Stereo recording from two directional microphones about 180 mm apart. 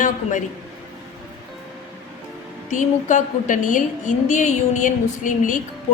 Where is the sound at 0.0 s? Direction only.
45° left (ahead or behind).